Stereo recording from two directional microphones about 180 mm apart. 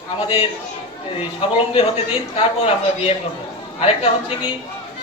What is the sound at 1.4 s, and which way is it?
A man's voice, 30° left (ahead or behind).